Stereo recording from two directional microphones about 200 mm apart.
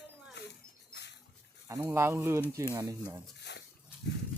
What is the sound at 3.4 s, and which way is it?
Dog, 60° left (ahead or behind).